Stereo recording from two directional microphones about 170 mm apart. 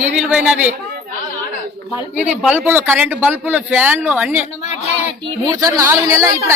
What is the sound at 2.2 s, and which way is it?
Speech, 10° right (ahead or behind).